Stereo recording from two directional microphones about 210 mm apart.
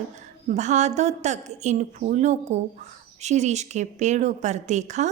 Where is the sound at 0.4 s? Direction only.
35° right (ahead or behind).